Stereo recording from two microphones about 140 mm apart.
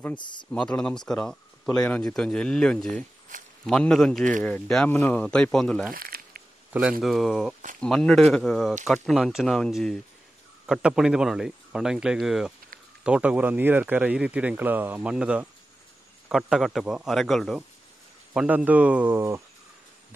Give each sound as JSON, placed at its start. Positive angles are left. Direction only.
{"t": 0.2, "sound": "speech", "side_deg": 35}
{"t": 0.5, "sound": "speech", "side_deg": 10}
{"t": 3.3, "sound": "a sound", "side_deg": -65}
{"t": 3.6, "sound": "speech", "side_deg": 5}
{"t": 4.1, "sound": "speech", "side_deg": -65}
{"t": 4.4, "sound": "speech", "side_deg": 10}
{"t": 5.9, "sound": "crumpling", "side_deg": -90}
{"t": 6.7, "sound": "speech", "side_deg": -10}